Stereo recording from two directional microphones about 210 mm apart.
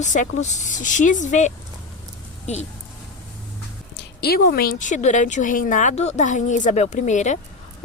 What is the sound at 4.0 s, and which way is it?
Speech, 50° left (ahead or behind).